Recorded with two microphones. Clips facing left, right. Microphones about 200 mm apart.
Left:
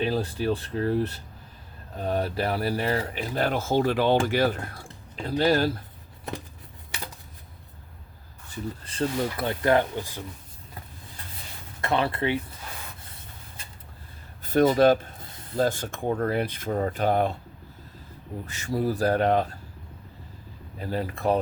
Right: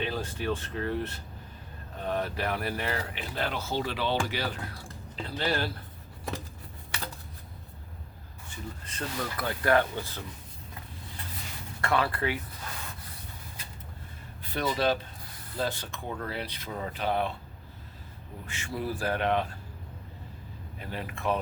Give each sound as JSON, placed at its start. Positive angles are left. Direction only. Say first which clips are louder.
{"t": 0.0, "sound": "speech", "louder": "left 6 dB", "side_deg": 35}
{"t": 8.4, "sound": "speech", "louder": "left 7 dB", "side_deg": 30}
{"t": 11.8, "sound": "speech", "louder": "left 3 dB", "side_deg": 25}
{"t": 14.4, "sound": "speech", "louder": "left 9 dB", "side_deg": 45}
{"t": 18.4, "sound": "speech", "louder": "left 7 dB", "side_deg": 40}
{"t": 20.7, "sound": "speech", "louder": "left 8 dB", "side_deg": 35}